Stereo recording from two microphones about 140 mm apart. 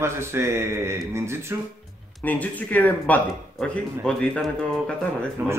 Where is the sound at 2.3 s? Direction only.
10° left (ahead or behind).